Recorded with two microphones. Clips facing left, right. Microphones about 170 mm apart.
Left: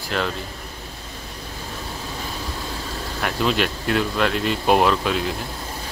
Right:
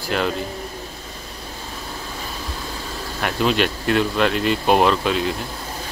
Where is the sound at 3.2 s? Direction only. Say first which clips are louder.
Right 2 dB; centre (ahead or behind).